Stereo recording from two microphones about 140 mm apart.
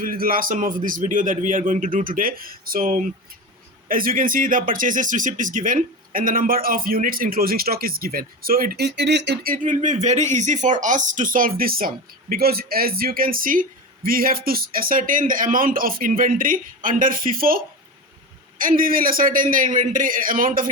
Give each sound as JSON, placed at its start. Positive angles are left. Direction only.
{"t": 0.0, "sound": "a man's voice", "side_deg": -90}
{"t": 18.6, "sound": "a man's voice", "side_deg": -90}